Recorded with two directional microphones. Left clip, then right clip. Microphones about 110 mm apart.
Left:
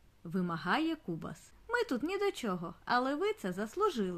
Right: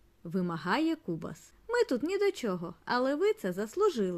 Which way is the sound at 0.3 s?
35° right (ahead or behind).